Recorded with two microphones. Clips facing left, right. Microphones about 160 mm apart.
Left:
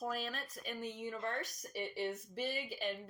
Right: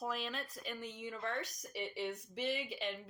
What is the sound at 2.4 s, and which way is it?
Speech, 85° right.